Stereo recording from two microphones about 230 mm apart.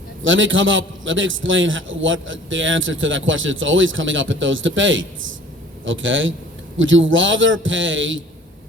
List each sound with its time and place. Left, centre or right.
0.2 s a man's voice: right